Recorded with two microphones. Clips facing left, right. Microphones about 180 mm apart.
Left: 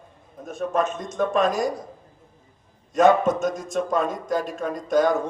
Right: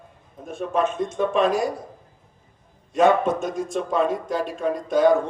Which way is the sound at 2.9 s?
45° left (ahead or behind).